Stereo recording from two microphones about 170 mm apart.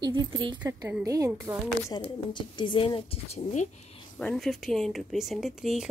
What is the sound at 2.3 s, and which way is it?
A woman's voice, 30° left (ahead or behind).